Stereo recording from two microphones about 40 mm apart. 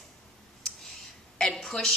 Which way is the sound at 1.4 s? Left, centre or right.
Centre.